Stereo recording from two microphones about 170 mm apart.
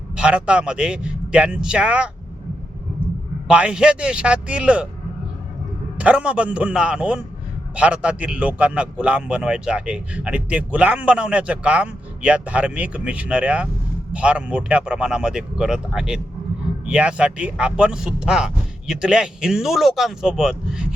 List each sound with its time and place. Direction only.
0.2 s a man's voice: 5° right (ahead or behind)
3.4 s a man's voice: 5° right (ahead or behind)
6.0 s a man's voice: 5° right (ahead or behind)